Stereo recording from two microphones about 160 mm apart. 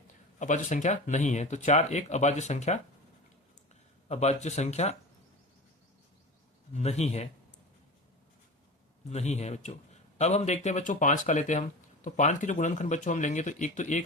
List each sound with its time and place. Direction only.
0.3 s a man's voice: 50° left (ahead or behind)
4.1 s a man's voice: 45° left (ahead or behind)
6.7 s a man's voice: 45° left (ahead or behind)
9.0 s a man's voice: 45° left (ahead or behind)